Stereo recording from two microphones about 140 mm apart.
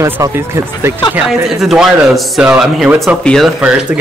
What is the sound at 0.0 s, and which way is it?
Speech, 20° right (ahead or behind).